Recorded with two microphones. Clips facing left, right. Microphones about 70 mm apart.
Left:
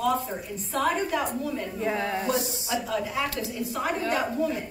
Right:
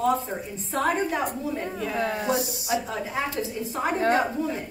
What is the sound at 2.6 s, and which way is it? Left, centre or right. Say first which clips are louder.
A woman's voice: right 1 dB; right.